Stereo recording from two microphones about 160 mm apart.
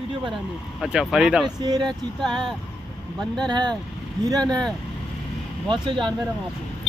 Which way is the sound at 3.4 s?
25° right (ahead or behind).